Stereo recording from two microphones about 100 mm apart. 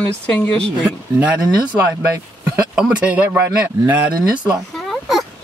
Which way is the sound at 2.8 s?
10° right (ahead or behind).